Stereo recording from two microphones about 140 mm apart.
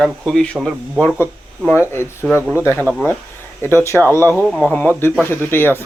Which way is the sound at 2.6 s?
15° left (ahead or behind).